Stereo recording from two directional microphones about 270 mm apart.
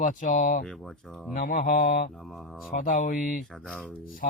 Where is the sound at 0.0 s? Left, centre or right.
Left.